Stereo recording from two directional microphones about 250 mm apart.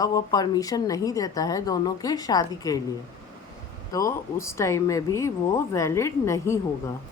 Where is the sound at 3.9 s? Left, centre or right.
Centre.